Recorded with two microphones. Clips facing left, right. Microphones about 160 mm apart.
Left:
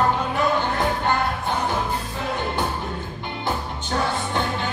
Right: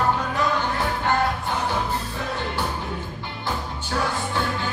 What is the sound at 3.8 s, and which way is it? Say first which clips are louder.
Music: left 1 dB; 20° left (ahead or behind).